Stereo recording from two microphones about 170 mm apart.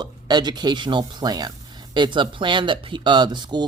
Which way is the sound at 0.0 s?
25° right (ahead or behind).